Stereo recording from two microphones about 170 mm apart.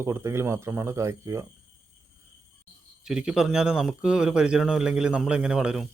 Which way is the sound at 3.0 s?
5° right (ahead or behind).